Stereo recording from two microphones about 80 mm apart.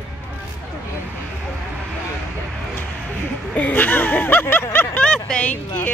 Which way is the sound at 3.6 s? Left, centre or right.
Left.